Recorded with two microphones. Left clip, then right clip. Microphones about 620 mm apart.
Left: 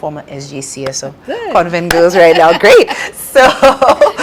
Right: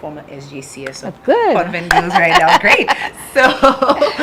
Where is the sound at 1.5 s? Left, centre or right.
Left.